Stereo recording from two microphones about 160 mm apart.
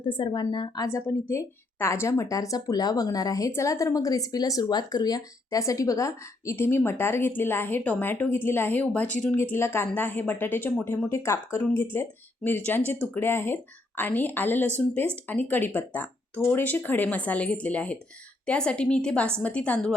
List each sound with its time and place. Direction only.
0.0 s a woman's voice: 30° left (ahead or behind)
0.9 s a woman's voice: 15° left (ahead or behind)